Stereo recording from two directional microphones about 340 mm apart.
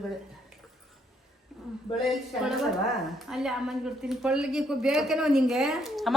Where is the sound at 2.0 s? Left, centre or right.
Centre.